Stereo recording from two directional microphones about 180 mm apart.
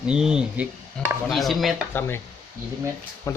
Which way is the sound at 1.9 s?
10° left (ahead or behind).